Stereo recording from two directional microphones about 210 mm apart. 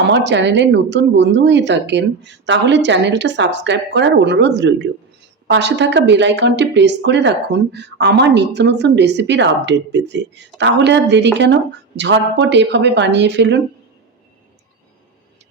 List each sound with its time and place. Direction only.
0.1 s a woman's voice: 55° right (ahead or behind)